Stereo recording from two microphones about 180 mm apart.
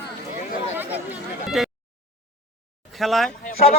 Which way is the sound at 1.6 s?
Centre (ahead or behind).